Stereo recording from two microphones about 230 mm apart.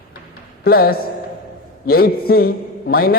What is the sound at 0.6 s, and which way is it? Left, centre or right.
A man's voice, left.